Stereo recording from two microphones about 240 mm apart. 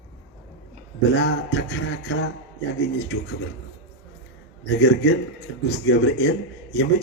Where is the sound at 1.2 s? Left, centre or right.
Left.